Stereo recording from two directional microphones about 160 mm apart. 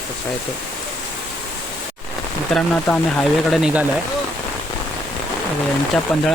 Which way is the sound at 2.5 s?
5° left (ahead or behind).